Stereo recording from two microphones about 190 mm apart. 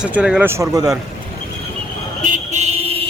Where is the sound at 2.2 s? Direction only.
40° right (ahead or behind).